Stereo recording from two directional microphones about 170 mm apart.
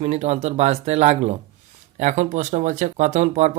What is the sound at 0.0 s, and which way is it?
Speech, 40° right (ahead or behind).